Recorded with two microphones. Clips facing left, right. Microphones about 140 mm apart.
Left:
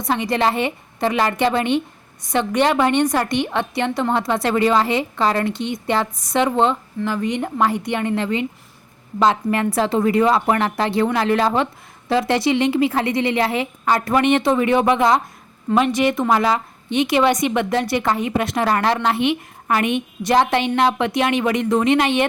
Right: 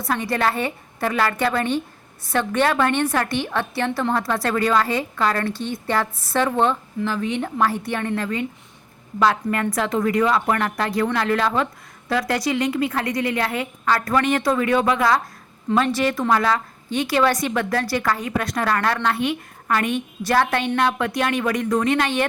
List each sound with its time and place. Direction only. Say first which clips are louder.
0.3 s a woman's voice: left 3 dB; 20° left (ahead or behind)